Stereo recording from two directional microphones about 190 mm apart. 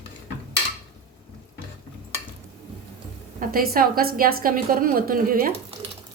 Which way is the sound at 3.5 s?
50° right (ahead or behind).